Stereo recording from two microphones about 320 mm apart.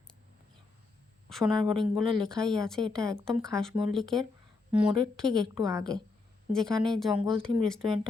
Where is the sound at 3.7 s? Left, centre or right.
Centre.